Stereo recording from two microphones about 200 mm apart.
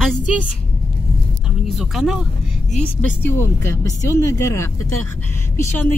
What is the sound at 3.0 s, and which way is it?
Speech, 10° left (ahead or behind).